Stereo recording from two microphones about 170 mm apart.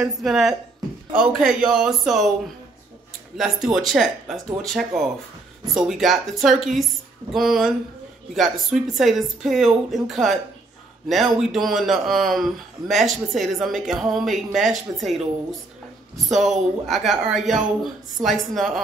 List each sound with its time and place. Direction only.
0.2 s a man's voice: centre (ahead or behind)
3.3 s a man's voice: centre (ahead or behind)
16.3 s a woman's voice: 45° right (ahead or behind)
16.8 s a man's voice: centre (ahead or behind)